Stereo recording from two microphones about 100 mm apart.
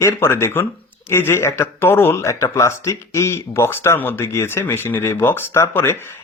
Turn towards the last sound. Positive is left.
turn(degrees=25)  # may be behind; listen again after turning